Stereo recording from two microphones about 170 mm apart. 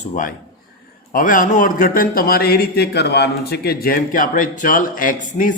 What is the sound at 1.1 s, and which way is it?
Speech, 55° left (ahead or behind).